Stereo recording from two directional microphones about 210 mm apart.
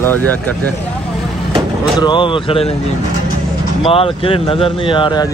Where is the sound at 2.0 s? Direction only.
20° left (ahead or behind).